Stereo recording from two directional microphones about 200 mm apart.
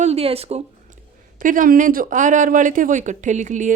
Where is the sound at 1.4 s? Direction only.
40° right (ahead or behind).